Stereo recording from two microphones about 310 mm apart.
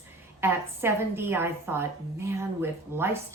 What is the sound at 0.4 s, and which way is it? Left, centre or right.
Speech, centre.